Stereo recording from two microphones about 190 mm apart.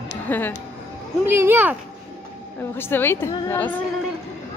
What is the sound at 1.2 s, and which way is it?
Speech, 10° right (ahead or behind).